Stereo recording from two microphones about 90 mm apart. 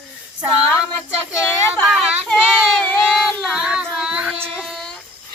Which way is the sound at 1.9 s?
5° right (ahead or behind).